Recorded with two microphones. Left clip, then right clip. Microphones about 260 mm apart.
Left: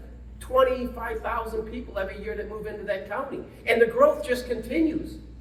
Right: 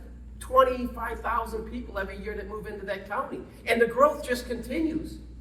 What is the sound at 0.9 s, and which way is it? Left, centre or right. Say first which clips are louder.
A woman's voice: even; centre.